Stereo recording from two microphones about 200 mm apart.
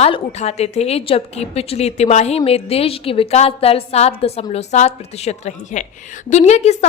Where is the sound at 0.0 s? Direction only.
35° left (ahead or behind).